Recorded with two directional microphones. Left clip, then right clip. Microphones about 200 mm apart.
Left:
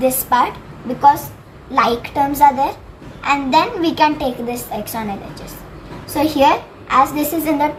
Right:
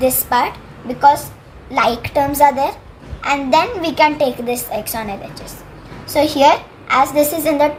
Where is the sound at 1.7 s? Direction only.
60° right (ahead or behind).